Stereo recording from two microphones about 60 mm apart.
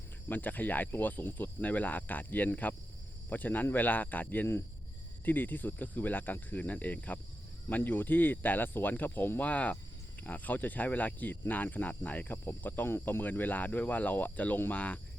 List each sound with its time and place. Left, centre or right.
0.3 s cricket: left
7.7 s speech: left
9.5 s cricket: left